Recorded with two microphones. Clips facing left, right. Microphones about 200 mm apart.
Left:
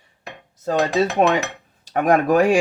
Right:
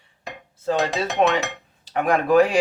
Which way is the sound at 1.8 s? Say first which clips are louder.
Left 4 dB; 45° left (ahead or behind).